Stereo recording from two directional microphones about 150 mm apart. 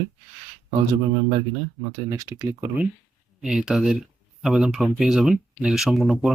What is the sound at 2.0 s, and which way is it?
Speech, 20° right (ahead or behind).